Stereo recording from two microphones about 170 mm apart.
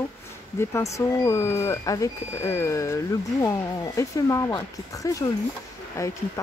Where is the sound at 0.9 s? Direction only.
15° left (ahead or behind).